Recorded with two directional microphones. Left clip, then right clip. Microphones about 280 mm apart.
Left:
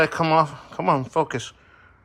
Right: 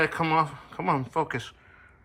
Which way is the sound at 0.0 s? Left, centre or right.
Centre.